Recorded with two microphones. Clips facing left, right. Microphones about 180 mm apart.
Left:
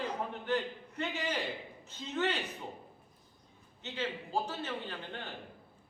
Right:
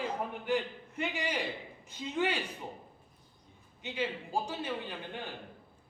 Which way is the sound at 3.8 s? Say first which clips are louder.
Right 2 dB; 15° right (ahead or behind).